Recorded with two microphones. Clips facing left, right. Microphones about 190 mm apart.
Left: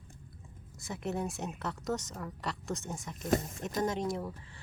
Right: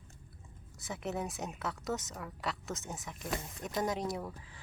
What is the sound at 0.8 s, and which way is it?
A woman's voice, centre (ahead or behind).